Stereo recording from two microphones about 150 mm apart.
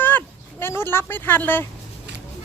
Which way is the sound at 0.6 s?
15° left (ahead or behind).